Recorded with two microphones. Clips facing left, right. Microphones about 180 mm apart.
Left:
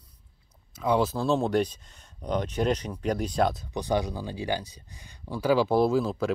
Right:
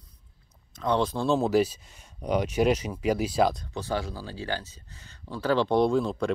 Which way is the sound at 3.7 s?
15° left (ahead or behind).